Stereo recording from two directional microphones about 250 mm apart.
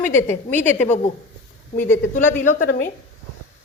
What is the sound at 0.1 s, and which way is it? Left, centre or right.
Speech, centre.